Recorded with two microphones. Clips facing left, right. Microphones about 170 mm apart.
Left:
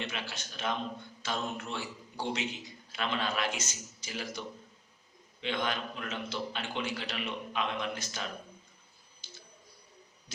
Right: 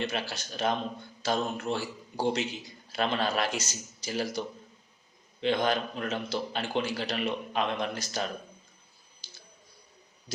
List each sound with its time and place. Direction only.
0.0 s a man's voice: 40° right (ahead or behind)
9.2 s clicking: 35° right (ahead or behind)
10.3 s speech: 40° right (ahead or behind)